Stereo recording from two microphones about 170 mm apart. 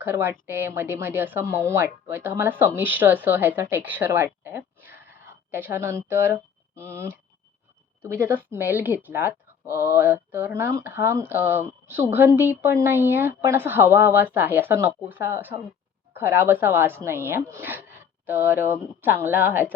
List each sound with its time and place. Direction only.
0.0 s a woman's voice: 15° right (ahead or behind)
3.8 s a sound: 10° right (ahead or behind)
6.1 s a woman's voice: 15° right (ahead or behind)